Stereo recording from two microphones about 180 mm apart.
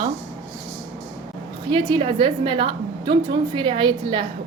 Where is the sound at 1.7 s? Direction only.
30° right (ahead or behind).